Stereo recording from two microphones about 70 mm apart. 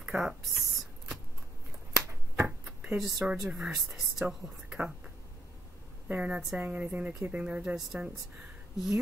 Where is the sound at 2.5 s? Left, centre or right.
Centre.